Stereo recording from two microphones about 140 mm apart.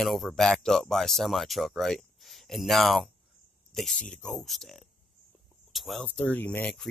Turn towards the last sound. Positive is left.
turn(degrees=10)  # may be behind; listen again after turning